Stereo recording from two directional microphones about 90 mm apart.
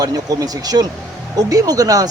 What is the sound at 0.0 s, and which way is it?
Speech, 45° right (ahead or behind).